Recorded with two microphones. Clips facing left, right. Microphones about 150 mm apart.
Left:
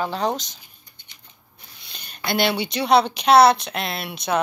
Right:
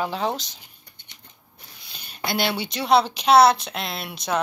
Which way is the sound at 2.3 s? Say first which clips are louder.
Left 3 dB; centre (ahead or behind).